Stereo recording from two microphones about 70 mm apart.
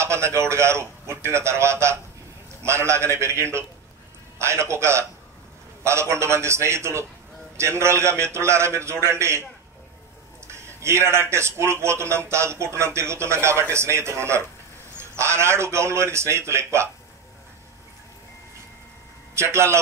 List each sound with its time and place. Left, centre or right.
0.0 s a man's voice: right
19.3 s a man's voice: right